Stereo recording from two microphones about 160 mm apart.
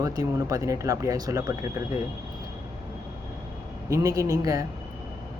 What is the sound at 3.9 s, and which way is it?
Speech, 20° right (ahead or behind).